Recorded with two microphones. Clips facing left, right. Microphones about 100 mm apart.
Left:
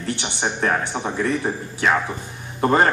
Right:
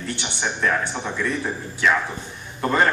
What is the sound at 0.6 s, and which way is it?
A man's voice, 40° left (ahead or behind).